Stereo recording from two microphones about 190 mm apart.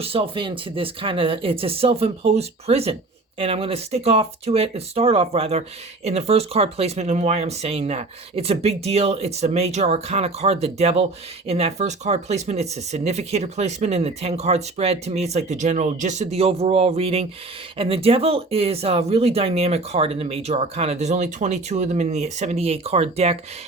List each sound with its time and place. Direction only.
0.0 s speech: 30° right (ahead or behind)